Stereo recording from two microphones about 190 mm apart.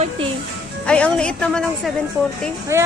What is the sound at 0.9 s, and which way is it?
A woman's voice, 5° left (ahead or behind).